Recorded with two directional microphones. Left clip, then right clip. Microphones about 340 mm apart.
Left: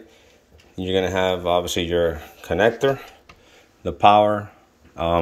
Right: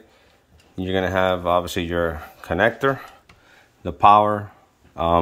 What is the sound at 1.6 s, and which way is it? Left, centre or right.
Speech, right.